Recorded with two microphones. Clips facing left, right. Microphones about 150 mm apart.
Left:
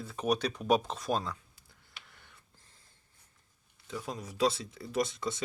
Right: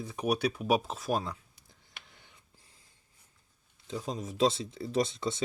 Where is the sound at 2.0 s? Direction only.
20° right (ahead or behind).